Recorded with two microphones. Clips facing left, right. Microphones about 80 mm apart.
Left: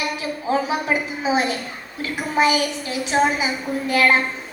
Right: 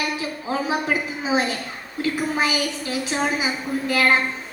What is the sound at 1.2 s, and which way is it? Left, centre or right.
A woman's voice, left.